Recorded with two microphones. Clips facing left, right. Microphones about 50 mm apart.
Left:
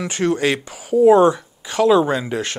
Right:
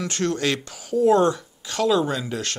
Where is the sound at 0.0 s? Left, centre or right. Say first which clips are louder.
Left 5 dB; centre.